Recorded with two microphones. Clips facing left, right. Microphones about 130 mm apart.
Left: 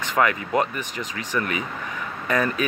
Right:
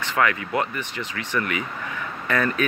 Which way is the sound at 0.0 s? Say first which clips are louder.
Left 1 dB; 15° left (ahead or behind).